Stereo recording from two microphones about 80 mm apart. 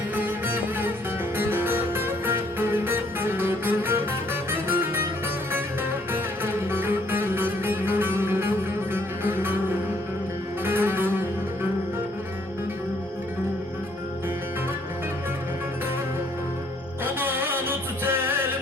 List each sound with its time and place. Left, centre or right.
0.2 s music: right
6.1 s music: right
17.0 s music: right